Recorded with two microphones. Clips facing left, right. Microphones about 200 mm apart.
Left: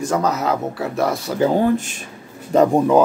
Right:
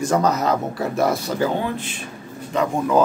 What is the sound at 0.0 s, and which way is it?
Speech, centre (ahead or behind).